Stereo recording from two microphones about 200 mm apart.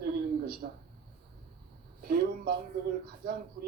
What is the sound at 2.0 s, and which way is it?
Speech, 50° right (ahead or behind).